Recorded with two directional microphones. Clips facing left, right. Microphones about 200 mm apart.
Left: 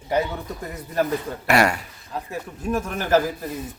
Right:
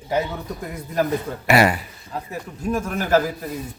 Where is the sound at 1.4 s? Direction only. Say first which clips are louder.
Right 2 dB; 5° right (ahead or behind).